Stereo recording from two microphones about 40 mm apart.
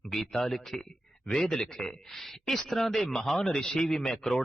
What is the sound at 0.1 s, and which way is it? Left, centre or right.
Speech, centre.